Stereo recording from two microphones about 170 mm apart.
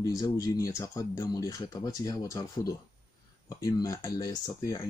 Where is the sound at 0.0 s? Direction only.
20° left (ahead or behind).